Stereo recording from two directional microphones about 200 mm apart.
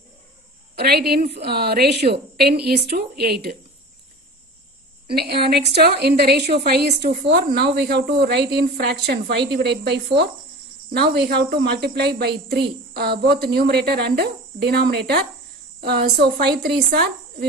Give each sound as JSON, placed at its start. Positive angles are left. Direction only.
{"t": 0.7, "sound": "a woman's voice", "side_deg": -50}
{"t": 5.0, "sound": "a woman's voice", "side_deg": -50}